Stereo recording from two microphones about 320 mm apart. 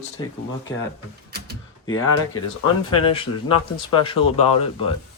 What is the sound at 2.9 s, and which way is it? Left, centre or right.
Speech, centre.